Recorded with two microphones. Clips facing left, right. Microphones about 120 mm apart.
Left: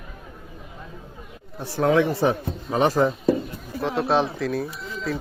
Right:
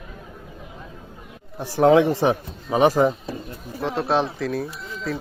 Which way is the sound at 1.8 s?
20° right (ahead or behind).